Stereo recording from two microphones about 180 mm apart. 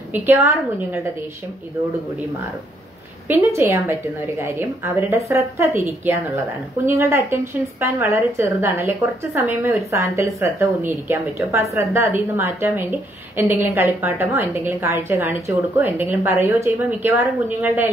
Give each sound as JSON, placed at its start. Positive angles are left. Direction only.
{"t": 0.1, "sound": "a woman's voice", "side_deg": -10}
{"t": 3.3, "sound": "a woman's voice", "side_deg": -15}